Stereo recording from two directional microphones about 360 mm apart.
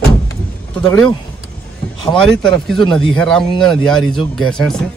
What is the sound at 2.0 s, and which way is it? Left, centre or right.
Speech, centre.